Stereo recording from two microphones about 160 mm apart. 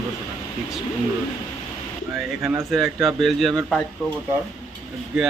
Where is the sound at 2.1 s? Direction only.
Centre (ahead or behind).